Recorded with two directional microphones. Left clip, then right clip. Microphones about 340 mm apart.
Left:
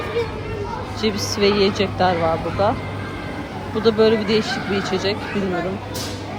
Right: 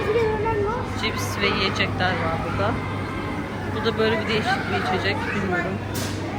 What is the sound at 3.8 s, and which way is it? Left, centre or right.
Speech, centre.